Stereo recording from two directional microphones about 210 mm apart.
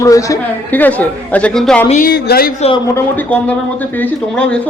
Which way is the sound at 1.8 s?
35° left (ahead or behind).